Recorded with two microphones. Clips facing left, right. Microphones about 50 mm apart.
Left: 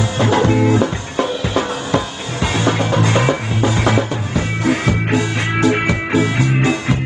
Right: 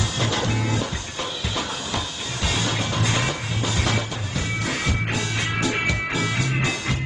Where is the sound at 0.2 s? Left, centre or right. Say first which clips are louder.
Left 12 dB; left.